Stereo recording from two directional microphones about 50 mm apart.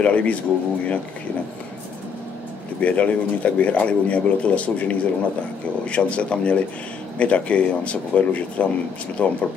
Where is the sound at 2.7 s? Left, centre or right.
Left.